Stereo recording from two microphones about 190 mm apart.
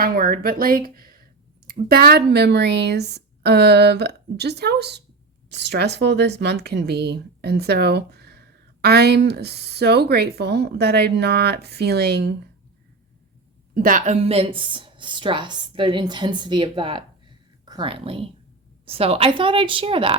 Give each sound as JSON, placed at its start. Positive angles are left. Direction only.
{"t": 0.0, "sound": "speech", "side_deg": -50}
{"t": 13.7, "sound": "a woman's voice", "side_deg": -45}